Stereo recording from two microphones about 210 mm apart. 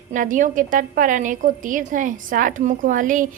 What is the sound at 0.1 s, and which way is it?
A woman's voice, 40° right (ahead or behind).